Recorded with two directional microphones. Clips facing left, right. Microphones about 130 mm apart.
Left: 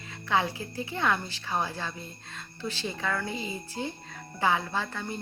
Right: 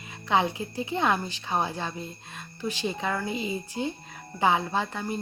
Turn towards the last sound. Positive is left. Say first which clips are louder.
# right 4 dB
turn(degrees=-15)  # may be behind; listen again after turning